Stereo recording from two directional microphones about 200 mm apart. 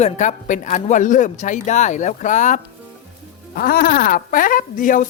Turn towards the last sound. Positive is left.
turn(degrees=40)  # may be behind; listen again after turning